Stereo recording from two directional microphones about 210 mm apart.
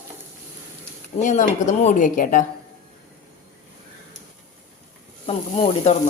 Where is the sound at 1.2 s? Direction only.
35° left (ahead or behind).